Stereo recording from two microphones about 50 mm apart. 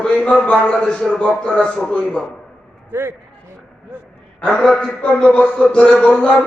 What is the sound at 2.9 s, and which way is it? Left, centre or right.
Speech, right.